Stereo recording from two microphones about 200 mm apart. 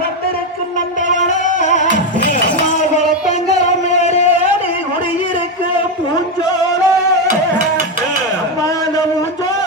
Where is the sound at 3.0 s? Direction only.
35° left (ahead or behind).